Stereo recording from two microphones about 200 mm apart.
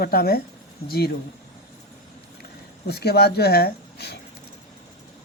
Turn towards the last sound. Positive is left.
turn(degrees=55)  # may be behind; listen again after turning